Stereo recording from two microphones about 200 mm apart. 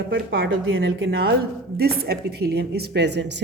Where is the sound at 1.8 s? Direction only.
50° right (ahead or behind).